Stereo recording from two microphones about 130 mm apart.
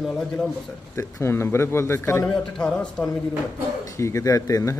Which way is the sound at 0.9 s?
20° left (ahead or behind).